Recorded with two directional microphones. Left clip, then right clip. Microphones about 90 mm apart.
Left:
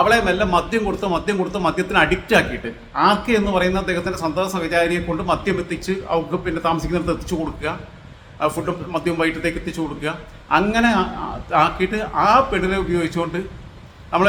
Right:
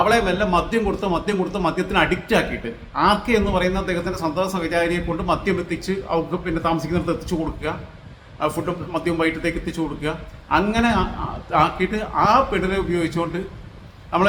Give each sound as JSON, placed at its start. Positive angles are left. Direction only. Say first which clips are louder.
{"t": 0.0, "sound": "a man's voice", "louder": "left 2 dB", "side_deg": 15}